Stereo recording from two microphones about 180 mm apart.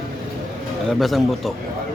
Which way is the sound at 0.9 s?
Centre (ahead or behind).